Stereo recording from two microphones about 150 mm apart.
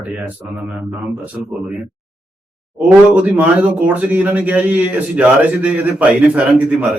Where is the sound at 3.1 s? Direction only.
10° right (ahead or behind).